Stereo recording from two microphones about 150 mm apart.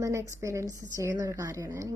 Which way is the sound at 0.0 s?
20° right (ahead or behind).